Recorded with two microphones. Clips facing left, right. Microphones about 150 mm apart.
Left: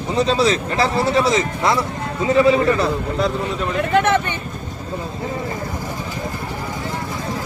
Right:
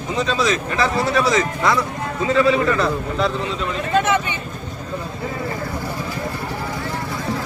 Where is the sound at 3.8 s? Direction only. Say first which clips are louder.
Left 2 dB; 60° left (ahead or behind).